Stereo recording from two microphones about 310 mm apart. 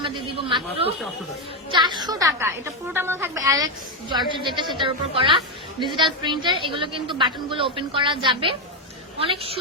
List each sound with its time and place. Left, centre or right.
0.0 s a woman's voice: centre